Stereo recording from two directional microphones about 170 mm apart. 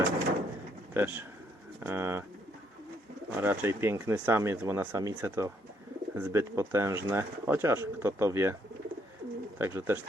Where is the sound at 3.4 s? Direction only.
15° right (ahead or behind).